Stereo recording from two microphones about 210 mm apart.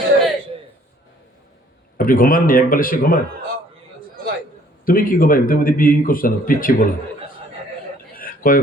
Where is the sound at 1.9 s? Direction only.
40° left (ahead or behind).